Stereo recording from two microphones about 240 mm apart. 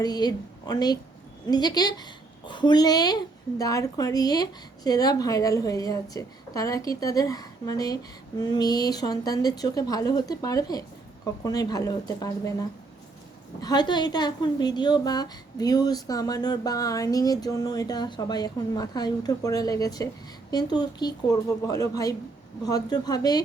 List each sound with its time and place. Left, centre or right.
0.0 s a woman's voice: centre
13.6 s a woman's voice: centre